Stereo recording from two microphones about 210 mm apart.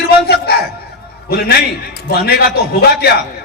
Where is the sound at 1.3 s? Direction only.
45° left (ahead or behind).